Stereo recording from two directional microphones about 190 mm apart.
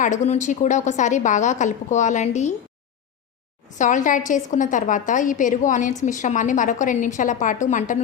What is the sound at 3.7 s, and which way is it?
A woman's voice, 40° left (ahead or behind).